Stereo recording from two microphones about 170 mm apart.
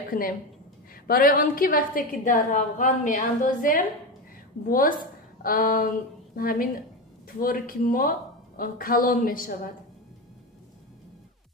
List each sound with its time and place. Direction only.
0.1 s a woman's voice: 55° left (ahead or behind)